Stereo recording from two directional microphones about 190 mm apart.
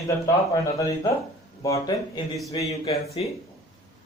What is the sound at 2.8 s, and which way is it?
Speech, 35° left (ahead or behind).